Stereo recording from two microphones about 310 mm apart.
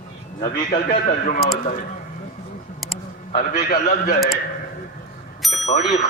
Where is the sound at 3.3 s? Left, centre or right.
Left.